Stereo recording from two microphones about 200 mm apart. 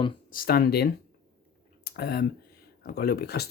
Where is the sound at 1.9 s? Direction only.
50° left (ahead or behind).